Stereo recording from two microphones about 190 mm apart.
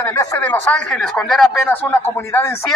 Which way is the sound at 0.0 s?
15° left (ahead or behind).